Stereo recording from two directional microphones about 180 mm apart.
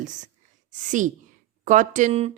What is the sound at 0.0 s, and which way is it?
Speech, 45° right (ahead or behind).